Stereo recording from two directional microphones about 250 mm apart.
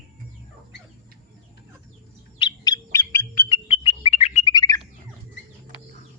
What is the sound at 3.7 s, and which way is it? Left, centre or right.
Bird, left.